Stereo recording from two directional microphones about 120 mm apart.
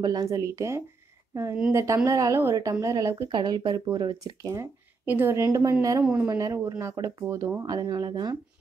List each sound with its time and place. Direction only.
0.0 s a woman's voice: 35° right (ahead or behind)
7.6 s speech: 35° right (ahead or behind)